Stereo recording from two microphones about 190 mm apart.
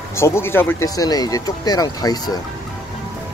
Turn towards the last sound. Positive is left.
turn(degrees=20)  # may be behind; listen again after turning